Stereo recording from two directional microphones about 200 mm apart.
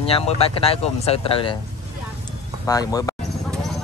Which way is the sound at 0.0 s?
30° left (ahead or behind).